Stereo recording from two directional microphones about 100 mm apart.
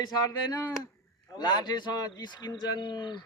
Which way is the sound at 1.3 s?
45° left (ahead or behind).